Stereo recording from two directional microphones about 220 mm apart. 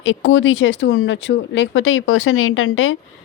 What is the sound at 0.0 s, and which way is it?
Speech, 60° left (ahead or behind).